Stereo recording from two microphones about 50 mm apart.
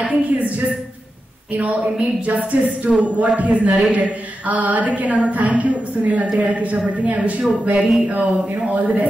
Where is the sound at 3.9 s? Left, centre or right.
Right.